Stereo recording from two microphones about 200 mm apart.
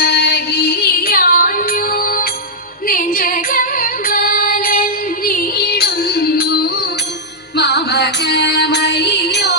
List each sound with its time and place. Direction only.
0.0 s music: 55° left (ahead or behind)
2.8 s female singing: 45° left (ahead or behind)
7.5 s music: 55° left (ahead or behind)